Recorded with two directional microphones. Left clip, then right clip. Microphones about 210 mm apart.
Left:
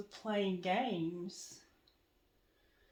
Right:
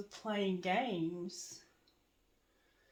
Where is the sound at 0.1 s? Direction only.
30° right (ahead or behind).